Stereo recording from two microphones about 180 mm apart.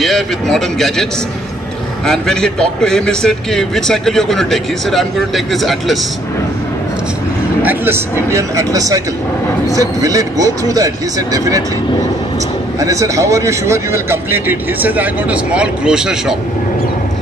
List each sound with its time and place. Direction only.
0.0 s a man's voice: centre (ahead or behind)
2.0 s a man's voice: 5° left (ahead or behind)
7.6 s speech: 10° right (ahead or behind)
12.8 s speech: 15° right (ahead or behind)